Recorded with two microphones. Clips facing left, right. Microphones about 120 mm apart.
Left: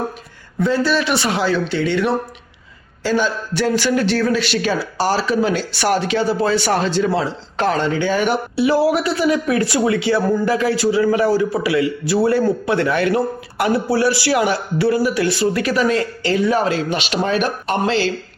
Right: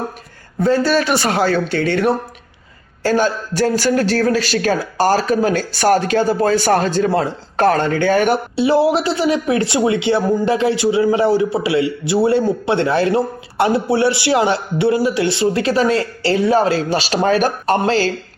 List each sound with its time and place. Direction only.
0.6 s a man's voice: 40° right (ahead or behind)
8.5 s speech: 25° right (ahead or behind)